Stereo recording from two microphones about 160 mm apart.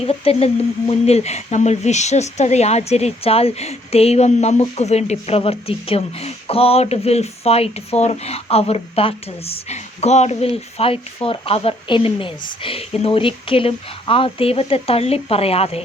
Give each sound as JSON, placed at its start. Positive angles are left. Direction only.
{"t": 0.0, "sound": "speech", "side_deg": 40}